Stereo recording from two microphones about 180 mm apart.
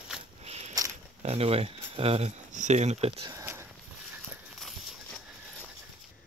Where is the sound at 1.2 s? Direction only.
35° right (ahead or behind).